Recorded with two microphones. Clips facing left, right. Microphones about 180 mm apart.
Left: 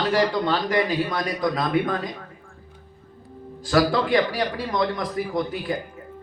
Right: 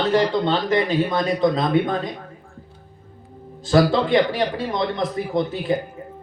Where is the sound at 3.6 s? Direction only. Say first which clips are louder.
Right 3 dB; 25° right (ahead or behind).